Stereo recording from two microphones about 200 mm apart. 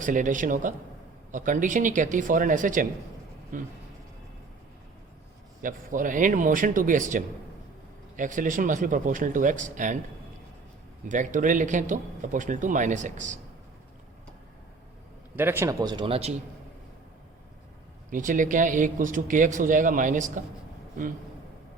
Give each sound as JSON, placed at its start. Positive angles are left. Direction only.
{"t": 0.0, "sound": "speech", "side_deg": -40}
{"t": 5.6, "sound": "speech", "side_deg": -40}
{"t": 11.1, "sound": "speech", "side_deg": -40}
{"t": 15.4, "sound": "speech", "side_deg": -10}
{"t": 18.1, "sound": "speech", "side_deg": -40}